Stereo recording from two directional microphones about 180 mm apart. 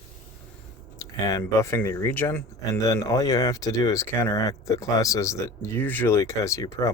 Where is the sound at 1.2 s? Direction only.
15° left (ahead or behind).